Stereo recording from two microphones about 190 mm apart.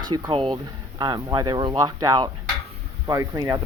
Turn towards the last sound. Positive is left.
turn(degrees=-15)  # may be behind; listen again after turning